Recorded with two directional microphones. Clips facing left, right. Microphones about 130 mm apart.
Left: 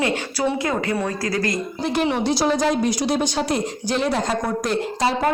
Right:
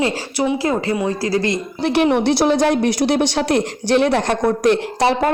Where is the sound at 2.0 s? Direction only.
60° right (ahead or behind).